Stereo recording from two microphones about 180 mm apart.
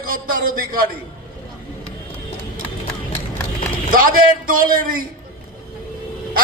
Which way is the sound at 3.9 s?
50° right (ahead or behind).